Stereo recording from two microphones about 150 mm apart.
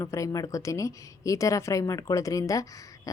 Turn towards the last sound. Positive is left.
turn(degrees=20)  # may be behind; listen again after turning